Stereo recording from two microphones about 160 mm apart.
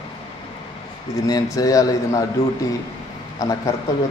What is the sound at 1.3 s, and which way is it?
Speech, 20° left (ahead or behind).